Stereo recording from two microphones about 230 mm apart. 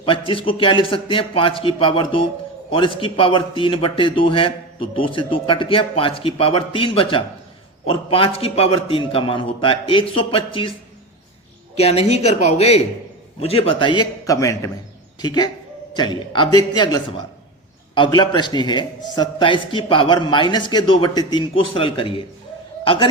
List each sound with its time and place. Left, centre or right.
0.0 s a man's voice: left
11.8 s a man's voice: left